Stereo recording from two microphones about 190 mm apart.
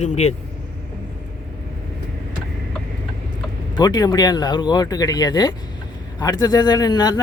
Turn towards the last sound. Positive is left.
turn(degrees=20)  # may be behind; listen again after turning